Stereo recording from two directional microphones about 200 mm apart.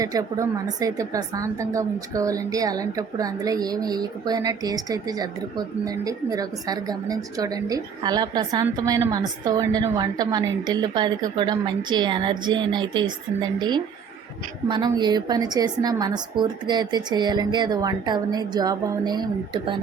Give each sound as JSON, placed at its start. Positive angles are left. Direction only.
{"t": 0.0, "sound": "a woman's voice", "side_deg": -15}